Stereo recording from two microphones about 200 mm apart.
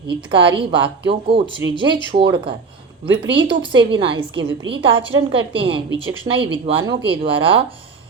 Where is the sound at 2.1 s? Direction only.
25° right (ahead or behind).